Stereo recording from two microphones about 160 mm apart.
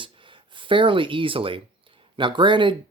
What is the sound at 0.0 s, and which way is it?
Speech, 30° right (ahead or behind).